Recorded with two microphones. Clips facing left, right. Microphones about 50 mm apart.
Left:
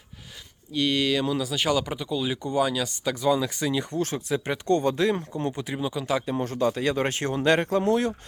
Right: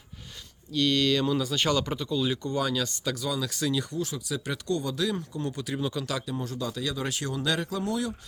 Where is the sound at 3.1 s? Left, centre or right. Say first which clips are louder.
Left 7 dB; left.